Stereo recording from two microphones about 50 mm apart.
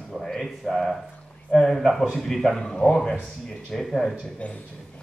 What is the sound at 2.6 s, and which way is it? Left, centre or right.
Speech, centre.